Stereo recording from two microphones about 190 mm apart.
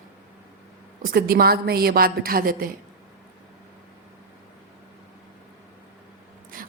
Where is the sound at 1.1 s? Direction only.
50° right (ahead or behind).